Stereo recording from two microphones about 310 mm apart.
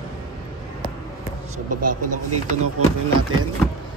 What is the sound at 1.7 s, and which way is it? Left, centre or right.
Speech, right.